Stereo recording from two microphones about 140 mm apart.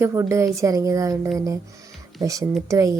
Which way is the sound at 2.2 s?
25° right (ahead or behind).